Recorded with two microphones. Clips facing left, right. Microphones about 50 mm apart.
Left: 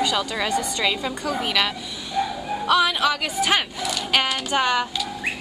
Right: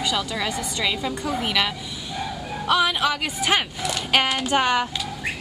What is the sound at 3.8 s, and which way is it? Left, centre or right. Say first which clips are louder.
Child singing: right 2 dB; right.